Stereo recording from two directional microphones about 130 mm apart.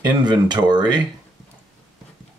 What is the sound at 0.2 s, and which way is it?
Speech, 35° right (ahead or behind).